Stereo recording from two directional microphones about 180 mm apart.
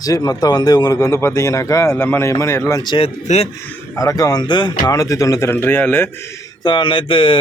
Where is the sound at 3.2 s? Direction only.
35° left (ahead or behind).